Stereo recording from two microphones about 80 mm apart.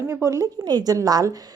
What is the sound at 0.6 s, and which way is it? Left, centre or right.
Speech, right.